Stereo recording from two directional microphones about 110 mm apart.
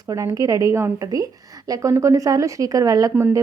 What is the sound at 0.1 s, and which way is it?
A woman's voice, 30° right (ahead or behind).